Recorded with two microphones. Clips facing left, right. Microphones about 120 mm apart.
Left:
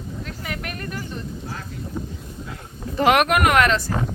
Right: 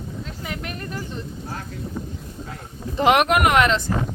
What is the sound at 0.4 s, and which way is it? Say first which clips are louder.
Speech: even; 20° right (ahead or behind).